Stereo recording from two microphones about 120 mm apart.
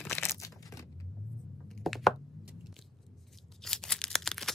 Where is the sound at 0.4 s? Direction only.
30° left (ahead or behind).